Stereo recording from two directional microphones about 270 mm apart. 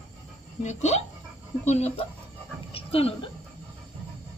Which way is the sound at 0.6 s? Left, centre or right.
Left.